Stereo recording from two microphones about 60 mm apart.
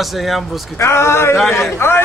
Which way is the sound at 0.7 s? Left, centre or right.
Left.